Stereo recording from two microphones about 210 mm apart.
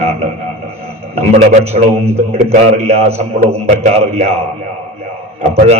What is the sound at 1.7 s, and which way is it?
Speech, 30° right (ahead or behind).